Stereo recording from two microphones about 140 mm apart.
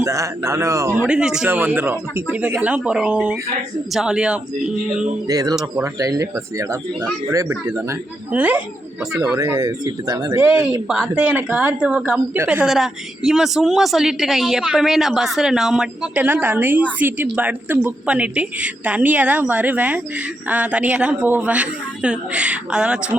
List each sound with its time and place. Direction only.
0.0 s speech: 20° right (ahead or behind)
1.0 s a woman's voice: 5° right (ahead or behind)
5.3 s speech: 25° right (ahead or behind)
8.3 s a woman's voice: 10° right (ahead or behind)
9.3 s speech: 20° right (ahead or behind)
10.4 s a woman's voice: 10° right (ahead or behind)
12.6 s a woman's voice: 5° right (ahead or behind)